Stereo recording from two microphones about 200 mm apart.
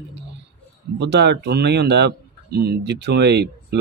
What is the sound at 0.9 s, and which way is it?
Speech, 60° right (ahead or behind).